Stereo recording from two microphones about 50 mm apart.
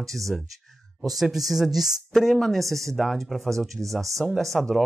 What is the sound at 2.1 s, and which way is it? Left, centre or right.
Speech, centre.